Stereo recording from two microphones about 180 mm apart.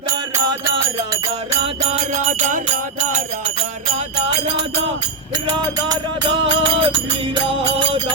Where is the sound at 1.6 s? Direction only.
40° right (ahead or behind).